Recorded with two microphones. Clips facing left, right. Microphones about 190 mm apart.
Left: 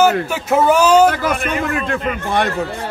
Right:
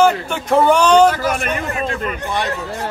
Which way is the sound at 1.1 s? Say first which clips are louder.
Even; 55° left (ahead or behind).